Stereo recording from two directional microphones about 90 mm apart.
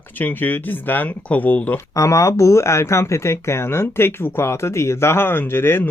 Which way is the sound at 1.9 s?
35° left (ahead or behind).